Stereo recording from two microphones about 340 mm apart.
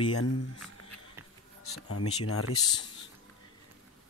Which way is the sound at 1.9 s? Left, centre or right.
Left.